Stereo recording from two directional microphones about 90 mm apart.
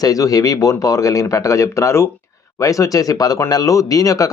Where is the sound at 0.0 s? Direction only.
40° left (ahead or behind).